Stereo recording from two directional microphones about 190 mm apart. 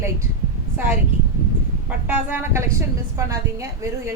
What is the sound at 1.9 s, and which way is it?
A woman's voice, 10° right (ahead or behind).